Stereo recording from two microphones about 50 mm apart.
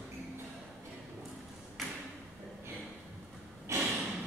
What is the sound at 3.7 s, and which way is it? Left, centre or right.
Snort, right.